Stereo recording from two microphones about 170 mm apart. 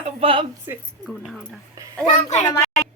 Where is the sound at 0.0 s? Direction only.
35° right (ahead or behind).